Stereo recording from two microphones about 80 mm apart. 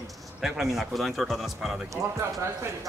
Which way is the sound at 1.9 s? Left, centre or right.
Right.